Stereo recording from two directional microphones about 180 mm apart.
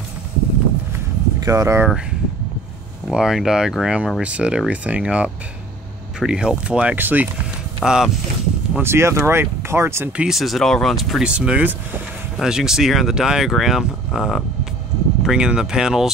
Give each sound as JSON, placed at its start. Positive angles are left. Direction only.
{"t": 1.4, "sound": "speech", "side_deg": -20}
{"t": 3.1, "sound": "speech", "side_deg": -5}
{"t": 10.2, "sound": "speech", "side_deg": 0}